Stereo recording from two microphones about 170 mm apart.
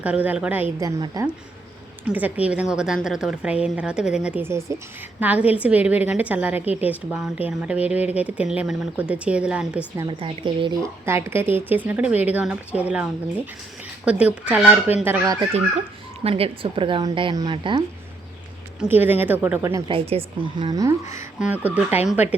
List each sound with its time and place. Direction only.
0.0 s a woman's voice: 10° right (ahead or behind)
2.0 s a woman's voice: 10° right (ahead or behind)
10.0 s speech: 30° right (ahead or behind)
11.0 s a woman's voice: 15° right (ahead or behind)
16.2 s speech: 35° right (ahead or behind)
18.8 s a woman's voice: 10° right (ahead or behind)
19.9 s speech: 35° right (ahead or behind); by 21.2 s 20° right (ahead or behind)
21.3 s a woman's voice: 10° right (ahead or behind)